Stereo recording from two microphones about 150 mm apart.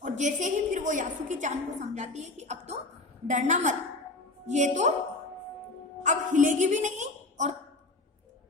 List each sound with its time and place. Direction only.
0.0 s a woman's voice: 55° right (ahead or behind)
6.0 s a woman's voice: 55° right (ahead or behind)